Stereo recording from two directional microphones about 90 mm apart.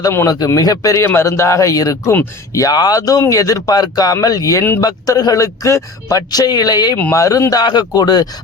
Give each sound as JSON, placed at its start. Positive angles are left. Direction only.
{"t": 0.3, "sound": "speech", "side_deg": 40}
{"t": 7.1, "sound": "speech", "side_deg": 35}
{"t": 7.6, "sound": "speech", "side_deg": 50}